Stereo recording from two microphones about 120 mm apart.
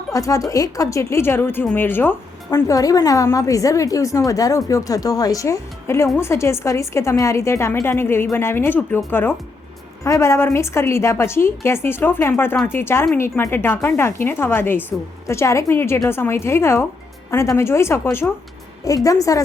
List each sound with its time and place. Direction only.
0.1 s a woman's voice: 25° left (ahead or behind)